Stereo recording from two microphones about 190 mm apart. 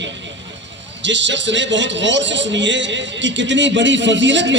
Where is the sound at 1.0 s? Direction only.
70° right (ahead or behind).